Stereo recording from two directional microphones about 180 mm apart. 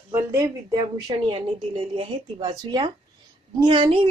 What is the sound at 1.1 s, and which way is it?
A woman's voice, 30° right (ahead or behind).